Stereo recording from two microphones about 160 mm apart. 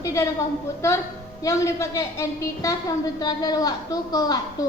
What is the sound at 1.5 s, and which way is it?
A woman's voice, 20° left (ahead or behind).